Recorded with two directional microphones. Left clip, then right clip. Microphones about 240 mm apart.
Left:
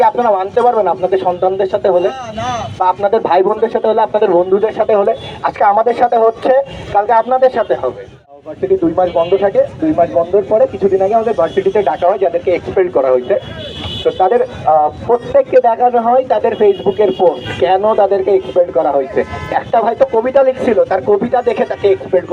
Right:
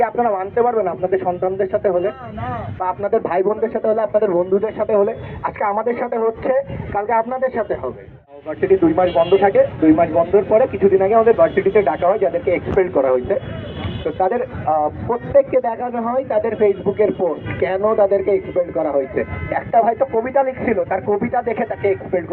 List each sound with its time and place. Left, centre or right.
0.0 s speech: left
9.0 s a man's voice: left